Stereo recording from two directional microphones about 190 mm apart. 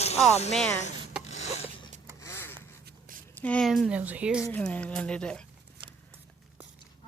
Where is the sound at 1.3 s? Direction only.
35° left (ahead or behind).